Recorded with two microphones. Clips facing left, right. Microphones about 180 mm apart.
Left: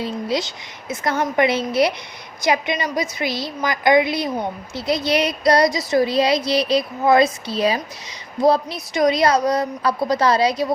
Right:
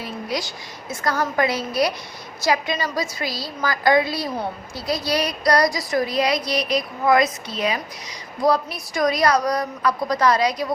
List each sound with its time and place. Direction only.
0.0 s speech: 25° left (ahead or behind)